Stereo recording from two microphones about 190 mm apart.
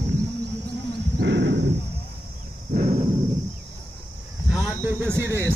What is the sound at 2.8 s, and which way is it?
Horse, 35° right (ahead or behind).